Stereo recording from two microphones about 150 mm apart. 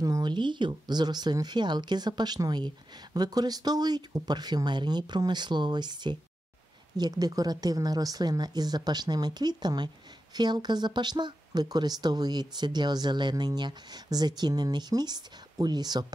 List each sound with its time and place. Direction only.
0.0 s speech: 25° right (ahead or behind)